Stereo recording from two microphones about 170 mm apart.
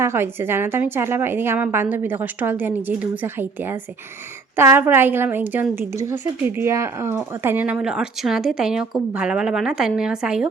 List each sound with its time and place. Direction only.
0.0 s a woman's voice: 15° right (ahead or behind)